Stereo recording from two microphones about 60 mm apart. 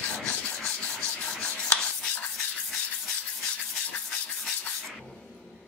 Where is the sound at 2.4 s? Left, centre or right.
Centre.